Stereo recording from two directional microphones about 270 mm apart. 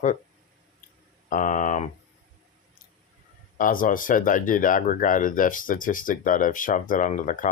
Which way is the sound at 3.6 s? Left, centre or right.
Left.